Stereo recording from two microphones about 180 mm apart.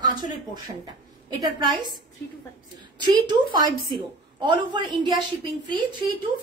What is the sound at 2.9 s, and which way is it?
A woman's voice, 25° right (ahead or behind).